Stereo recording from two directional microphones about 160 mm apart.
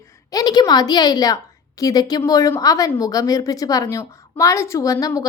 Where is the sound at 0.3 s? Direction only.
25° left (ahead or behind).